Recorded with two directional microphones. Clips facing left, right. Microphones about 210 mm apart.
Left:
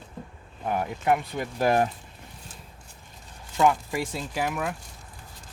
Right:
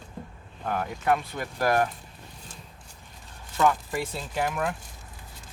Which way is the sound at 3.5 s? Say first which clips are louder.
Left 1 dB; 15° left (ahead or behind).